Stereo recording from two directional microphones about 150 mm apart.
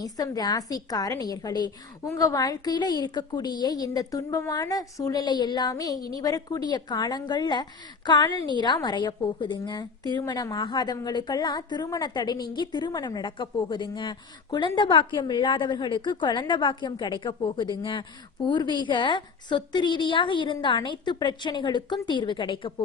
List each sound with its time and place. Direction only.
0.0 s a woman's voice: 25° left (ahead or behind)